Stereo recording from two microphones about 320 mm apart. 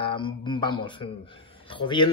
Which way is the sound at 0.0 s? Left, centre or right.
Centre.